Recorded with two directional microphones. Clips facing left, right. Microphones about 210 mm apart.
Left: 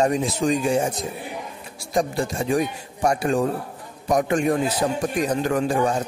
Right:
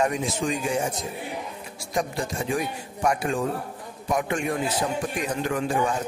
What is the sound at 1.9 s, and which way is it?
Speech, 35° left (ahead or behind).